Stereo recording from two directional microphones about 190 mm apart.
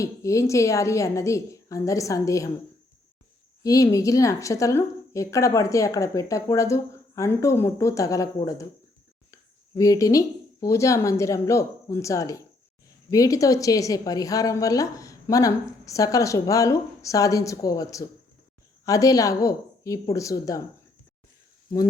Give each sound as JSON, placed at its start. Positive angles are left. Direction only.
{"t": 0.0, "sound": "a woman's voice", "side_deg": 15}
{"t": 3.6, "sound": "a woman's voice", "side_deg": 15}